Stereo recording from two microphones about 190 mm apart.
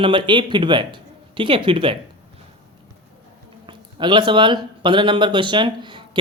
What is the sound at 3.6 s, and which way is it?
Speech, 25° right (ahead or behind).